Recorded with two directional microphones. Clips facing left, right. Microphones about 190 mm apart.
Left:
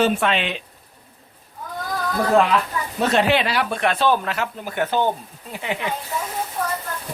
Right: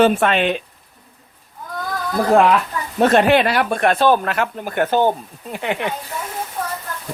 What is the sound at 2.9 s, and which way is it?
Speech, 50° right (ahead or behind).